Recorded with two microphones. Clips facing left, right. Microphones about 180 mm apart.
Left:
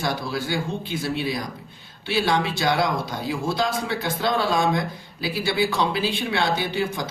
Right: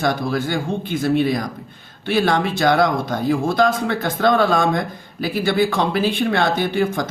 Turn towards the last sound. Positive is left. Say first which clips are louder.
# right 6 dB
turn(degrees=-50)  # may be behind; listen again after turning